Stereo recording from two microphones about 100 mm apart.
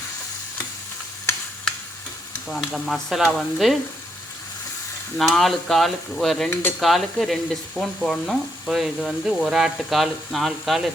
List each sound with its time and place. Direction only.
2.5 s frying: centre (ahead or behind)
5.1 s frying: 5° left (ahead or behind)
6.5 s stir: 20° left (ahead or behind)
6.7 s frying: centre (ahead or behind)